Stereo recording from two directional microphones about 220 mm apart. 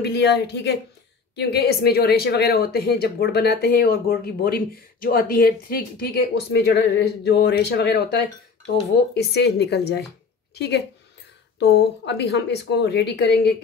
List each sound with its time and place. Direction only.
0.0 s speech: 50° left (ahead or behind)
9.1 s speech: 50° left (ahead or behind)